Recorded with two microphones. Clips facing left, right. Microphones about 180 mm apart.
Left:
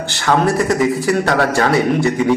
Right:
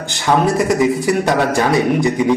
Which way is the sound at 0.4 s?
20° right (ahead or behind).